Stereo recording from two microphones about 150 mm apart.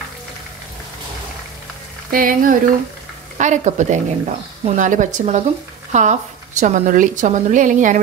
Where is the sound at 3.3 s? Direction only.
55° right (ahead or behind).